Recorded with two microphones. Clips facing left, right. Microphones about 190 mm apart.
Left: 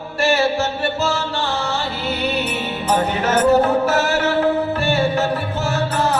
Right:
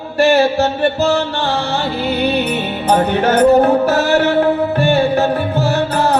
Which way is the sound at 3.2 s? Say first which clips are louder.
Right 4 dB; 35° right (ahead or behind).